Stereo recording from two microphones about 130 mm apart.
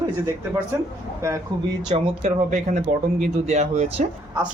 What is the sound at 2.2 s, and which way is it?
Speech, 75° right (ahead or behind).